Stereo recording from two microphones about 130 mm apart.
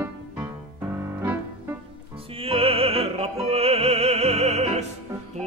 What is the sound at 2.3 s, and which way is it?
Music, 45° right (ahead or behind).